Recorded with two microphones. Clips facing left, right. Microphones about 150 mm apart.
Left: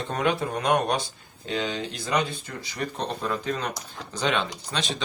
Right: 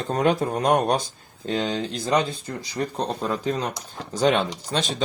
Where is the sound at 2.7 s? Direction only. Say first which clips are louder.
Right 4 dB; 30° right (ahead or behind).